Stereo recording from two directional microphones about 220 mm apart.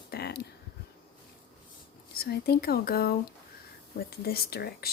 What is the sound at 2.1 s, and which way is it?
Speech, 45° left (ahead or behind).